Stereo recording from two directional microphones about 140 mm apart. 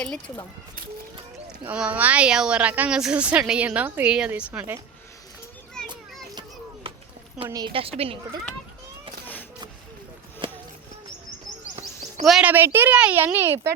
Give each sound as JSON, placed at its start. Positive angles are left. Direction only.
{"t": 1.6, "sound": "a woman's voice", "side_deg": -10}
{"t": 6.8, "sound": "a sound", "side_deg": -40}
{"t": 7.4, "sound": "a woman's voice", "side_deg": -25}
{"t": 7.7, "sound": "a woman's voice", "side_deg": -40}
{"t": 10.4, "sound": "a sound", "side_deg": -35}
{"t": 12.2, "sound": "speech", "side_deg": 0}
{"t": 12.5, "sound": "a woman's voice", "side_deg": -15}